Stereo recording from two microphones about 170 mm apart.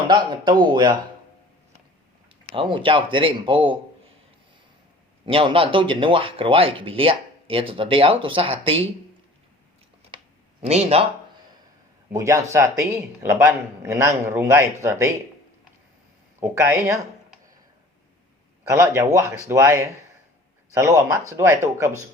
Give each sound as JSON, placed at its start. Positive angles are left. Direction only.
{"t": 0.1, "sound": "a man's voice", "side_deg": -25}
{"t": 2.5, "sound": "speech", "side_deg": -30}
{"t": 5.2, "sound": "speech", "side_deg": -30}
{"t": 10.7, "sound": "speech", "side_deg": -40}
{"t": 12.1, "sound": "a man's voice", "side_deg": -15}
{"t": 16.4, "sound": "a man's voice", "side_deg": -15}
{"t": 18.7, "sound": "a man's voice", "side_deg": -15}